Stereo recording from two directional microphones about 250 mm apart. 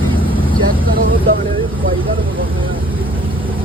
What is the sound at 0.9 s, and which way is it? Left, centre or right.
Vehicle, right.